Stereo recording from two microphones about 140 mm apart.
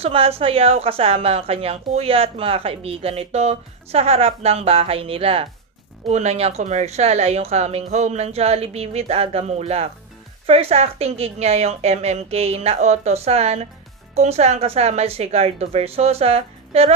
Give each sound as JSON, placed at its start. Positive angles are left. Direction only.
{"t": 0.0, "sound": "a woman's voice", "side_deg": -45}